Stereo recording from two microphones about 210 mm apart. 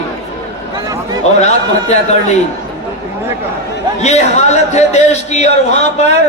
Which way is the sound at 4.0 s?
30° left (ahead or behind).